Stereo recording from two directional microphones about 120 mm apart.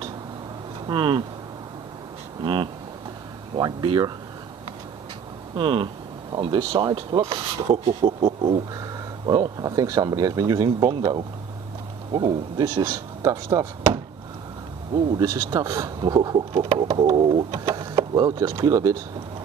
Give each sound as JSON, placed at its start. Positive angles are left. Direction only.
{"t": 0.8, "sound": "speech", "side_deg": -45}
{"t": 2.4, "sound": "speech", "side_deg": -40}
{"t": 5.6, "sound": "speech", "side_deg": -40}
{"t": 7.7, "sound": "speech", "side_deg": -50}
{"t": 12.1, "sound": "speech", "side_deg": -40}
{"t": 15.1, "sound": "speech", "side_deg": -30}
{"t": 16.3, "sound": "speech", "side_deg": -45}
{"t": 16.8, "sound": "speech", "side_deg": -30}
{"t": 17.2, "sound": "speech", "side_deg": -45}
{"t": 17.9, "sound": "speech", "side_deg": -35}